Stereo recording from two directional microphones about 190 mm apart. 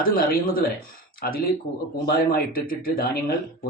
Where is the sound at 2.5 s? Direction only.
50° left (ahead or behind).